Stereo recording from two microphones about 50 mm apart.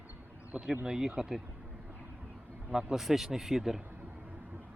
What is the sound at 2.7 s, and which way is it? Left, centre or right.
Speech, centre.